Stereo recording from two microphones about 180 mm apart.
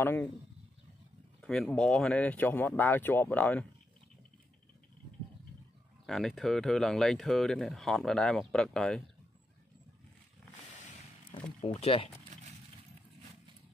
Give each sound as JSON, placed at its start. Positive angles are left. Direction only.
{"t": 0.0, "sound": "speech", "side_deg": 10}
{"t": 1.4, "sound": "speech", "side_deg": 5}
{"t": 6.0, "sound": "speech", "side_deg": 0}
{"t": 11.6, "sound": "speech", "side_deg": 35}
{"t": 12.3, "sound": "a sound", "side_deg": -40}